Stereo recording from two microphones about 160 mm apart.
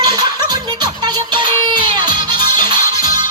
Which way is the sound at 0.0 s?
25° right (ahead or behind).